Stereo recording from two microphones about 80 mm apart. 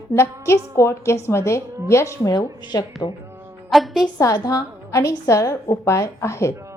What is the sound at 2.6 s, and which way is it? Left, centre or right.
Speech, left.